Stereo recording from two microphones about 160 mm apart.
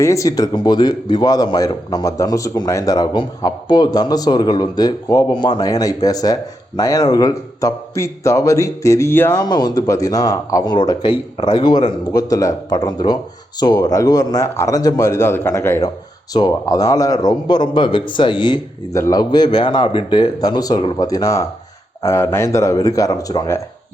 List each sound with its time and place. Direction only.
0.0 s speech: 20° left (ahead or behind)
9.4 s speech: 25° left (ahead or behind)